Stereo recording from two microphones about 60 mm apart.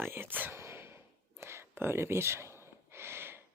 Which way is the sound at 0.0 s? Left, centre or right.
Right.